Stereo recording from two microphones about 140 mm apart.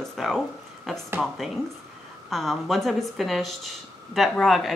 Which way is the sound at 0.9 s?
Centre (ahead or behind).